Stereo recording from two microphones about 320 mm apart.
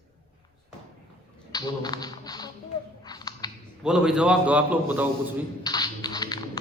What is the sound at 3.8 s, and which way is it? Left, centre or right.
A man's voice, centre.